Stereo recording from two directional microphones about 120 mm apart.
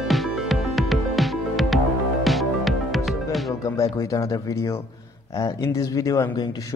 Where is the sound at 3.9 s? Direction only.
30° left (ahead or behind).